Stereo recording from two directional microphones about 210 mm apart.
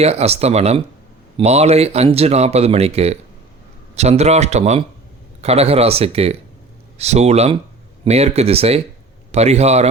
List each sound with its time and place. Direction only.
0.0 s speech: 30° right (ahead or behind)